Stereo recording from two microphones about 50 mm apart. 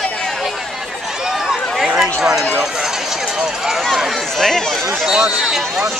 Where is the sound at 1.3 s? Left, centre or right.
Centre.